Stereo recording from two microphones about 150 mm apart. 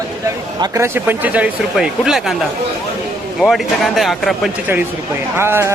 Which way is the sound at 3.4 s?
Centre (ahead or behind).